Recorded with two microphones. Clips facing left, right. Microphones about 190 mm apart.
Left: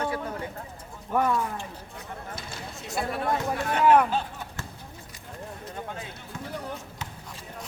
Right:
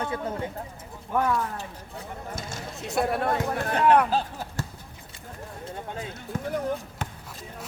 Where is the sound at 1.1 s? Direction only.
10° left (ahead or behind).